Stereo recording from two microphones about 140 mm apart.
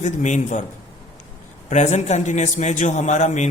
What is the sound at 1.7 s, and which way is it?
Speech, 55° left (ahead or behind).